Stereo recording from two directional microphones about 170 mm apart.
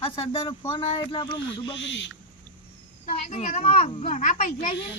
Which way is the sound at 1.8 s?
90° left.